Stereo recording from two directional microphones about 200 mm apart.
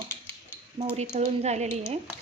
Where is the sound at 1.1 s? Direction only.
35° right (ahead or behind).